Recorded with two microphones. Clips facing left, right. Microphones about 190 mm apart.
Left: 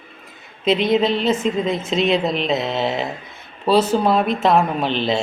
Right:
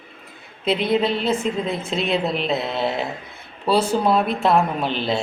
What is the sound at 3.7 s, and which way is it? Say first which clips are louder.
Speech: left 2 dB; 10° right (ahead or behind).